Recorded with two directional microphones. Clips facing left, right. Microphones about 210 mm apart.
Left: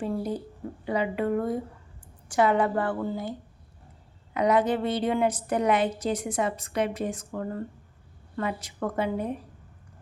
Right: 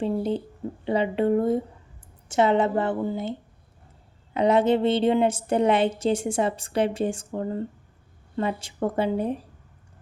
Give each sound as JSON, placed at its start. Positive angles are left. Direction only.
{"t": 0.0, "sound": "a woman's voice", "side_deg": -25}
{"t": 4.4, "sound": "a woman's voice", "side_deg": -25}